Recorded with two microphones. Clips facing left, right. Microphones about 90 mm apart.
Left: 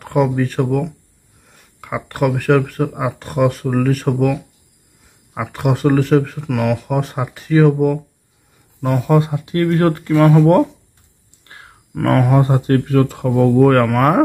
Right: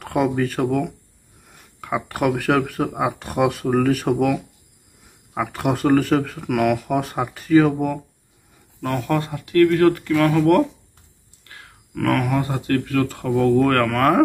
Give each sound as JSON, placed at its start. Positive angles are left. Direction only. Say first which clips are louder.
{"t": 0.0, "sound": "speech", "louder": "left 3 dB", "side_deg": 0}
{"t": 8.8, "sound": "speech", "louder": "left 6 dB", "side_deg": 15}
{"t": 9.5, "sound": "speech", "louder": "right 3 dB", "side_deg": 35}
{"t": 13.1, "sound": "speech", "louder": "left 4 dB", "side_deg": 5}
{"t": 13.7, "sound": "speech", "louder": "left 5 dB", "side_deg": 20}